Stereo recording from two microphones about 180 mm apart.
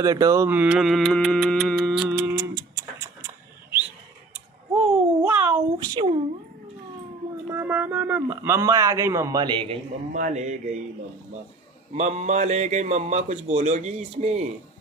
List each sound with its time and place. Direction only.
0.0 s mantra: 20° right (ahead or behind)
4.3 s a sound: 5° right (ahead or behind)
7.4 s speech: 10° right (ahead or behind)
10.1 s speech: 40° right (ahead or behind)
11.9 s speech: 40° right (ahead or behind)